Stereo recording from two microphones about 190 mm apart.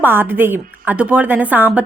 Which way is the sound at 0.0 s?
10° right (ahead or behind).